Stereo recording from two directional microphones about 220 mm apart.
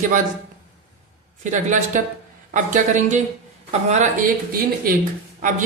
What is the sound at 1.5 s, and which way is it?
Speech, 35° right (ahead or behind).